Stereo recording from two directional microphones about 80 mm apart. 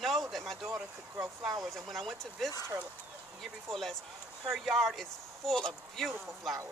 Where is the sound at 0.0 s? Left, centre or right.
Centre.